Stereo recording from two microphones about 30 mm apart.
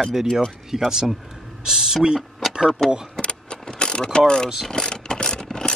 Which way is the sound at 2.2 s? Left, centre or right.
Centre.